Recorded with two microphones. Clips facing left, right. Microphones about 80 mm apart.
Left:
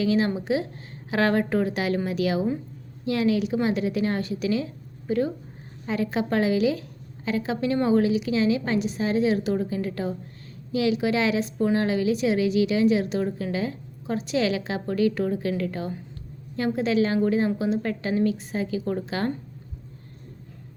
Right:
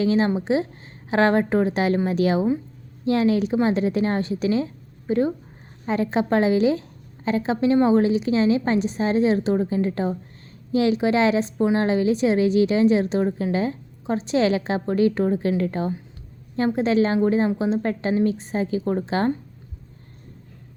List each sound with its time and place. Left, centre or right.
0.0 s a woman's voice: right